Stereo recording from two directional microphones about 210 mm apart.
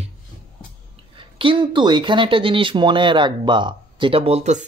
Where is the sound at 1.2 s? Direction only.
25° right (ahead or behind).